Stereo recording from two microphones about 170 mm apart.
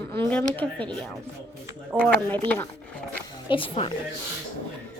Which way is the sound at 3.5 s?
30° left (ahead or behind).